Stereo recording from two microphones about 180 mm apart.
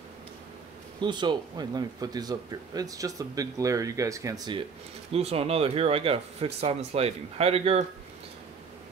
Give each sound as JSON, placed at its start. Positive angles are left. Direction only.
{"t": 1.0, "sound": "speech", "side_deg": -25}
{"t": 5.1, "sound": "speech", "side_deg": -35}